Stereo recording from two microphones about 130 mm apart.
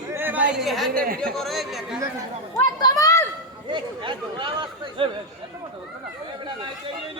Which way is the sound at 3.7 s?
40° right (ahead or behind).